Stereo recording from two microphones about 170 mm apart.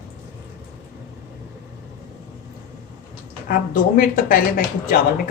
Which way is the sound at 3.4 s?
55° left (ahead or behind).